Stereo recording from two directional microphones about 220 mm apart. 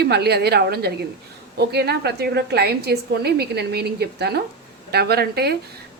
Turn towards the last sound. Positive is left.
turn(degrees=-45)  # may be behind; listen again after turning